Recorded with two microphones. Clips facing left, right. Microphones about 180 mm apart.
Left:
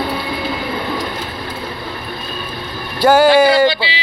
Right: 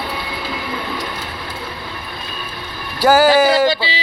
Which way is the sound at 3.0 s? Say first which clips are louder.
Left 2 dB; 5° right (ahead or behind).